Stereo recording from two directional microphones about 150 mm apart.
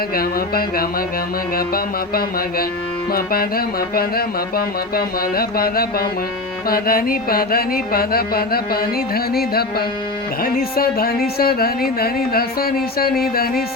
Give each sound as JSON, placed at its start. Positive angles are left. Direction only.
{"t": 0.1, "sound": "speech", "side_deg": 85}
{"t": 6.7, "sound": "music", "side_deg": 80}
{"t": 10.4, "sound": "speech", "side_deg": 80}